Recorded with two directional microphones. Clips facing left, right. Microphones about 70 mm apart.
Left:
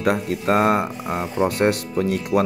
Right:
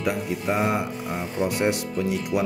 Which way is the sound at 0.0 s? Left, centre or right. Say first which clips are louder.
Left 5 dB; left.